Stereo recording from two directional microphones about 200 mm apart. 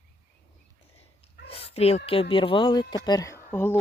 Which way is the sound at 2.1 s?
25° left (ahead or behind).